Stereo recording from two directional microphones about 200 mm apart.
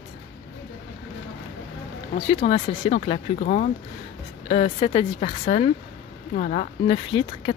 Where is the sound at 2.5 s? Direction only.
30° left (ahead or behind).